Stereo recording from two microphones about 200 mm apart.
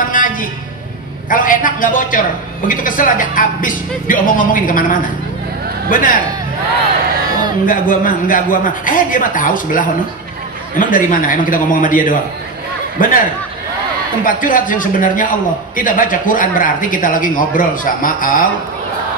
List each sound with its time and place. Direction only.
0.1 s a sound: 45° left (ahead or behind)
1.3 s a man's voice: 40° left (ahead or behind)
7.6 s a man's voice: 45° left (ahead or behind)
14.2 s a man's voice: 45° left (ahead or behind)